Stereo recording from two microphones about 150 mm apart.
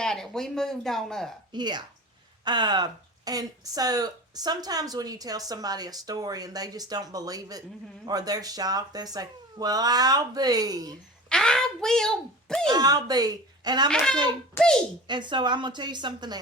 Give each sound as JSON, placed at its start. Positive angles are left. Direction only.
{"t": 0.0, "sound": "speech", "side_deg": 5}
{"t": 1.5, "sound": "speech", "side_deg": -30}
{"t": 11.3, "sound": "speech", "side_deg": 5}
{"t": 12.6, "sound": "speech", "side_deg": -25}
{"t": 13.9, "sound": "speech", "side_deg": 5}
{"t": 15.0, "sound": "a woman's voice", "side_deg": -30}